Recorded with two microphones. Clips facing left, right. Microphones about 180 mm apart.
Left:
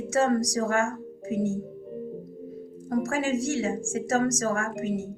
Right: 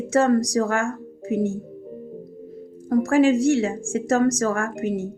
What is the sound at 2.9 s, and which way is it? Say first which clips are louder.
Speech: right 9 dB; 65° right (ahead or behind).